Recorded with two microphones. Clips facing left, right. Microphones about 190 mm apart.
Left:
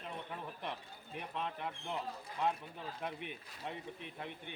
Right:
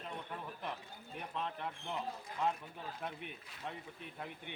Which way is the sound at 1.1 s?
5° left (ahead or behind).